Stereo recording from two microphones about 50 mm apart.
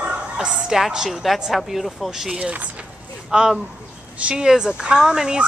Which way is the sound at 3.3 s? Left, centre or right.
Centre.